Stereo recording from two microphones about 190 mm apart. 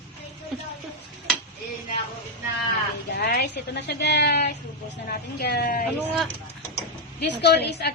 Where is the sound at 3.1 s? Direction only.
55° left (ahead or behind).